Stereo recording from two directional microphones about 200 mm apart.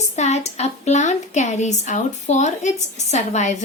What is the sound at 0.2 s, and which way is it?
A woman's voice, 35° left (ahead or behind).